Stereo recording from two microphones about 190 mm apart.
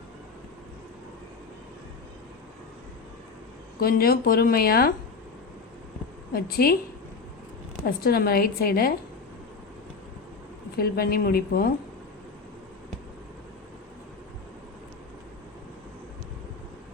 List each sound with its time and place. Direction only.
3.8 s speech: 50° left (ahead or behind)
6.3 s speech: 50° left (ahead or behind)
7.9 s speech: 50° left (ahead or behind)
10.8 s speech: 50° left (ahead or behind)